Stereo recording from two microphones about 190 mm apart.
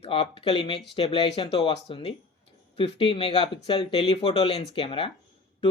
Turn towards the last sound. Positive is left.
turn(degrees=30)  # may be behind; listen again after turning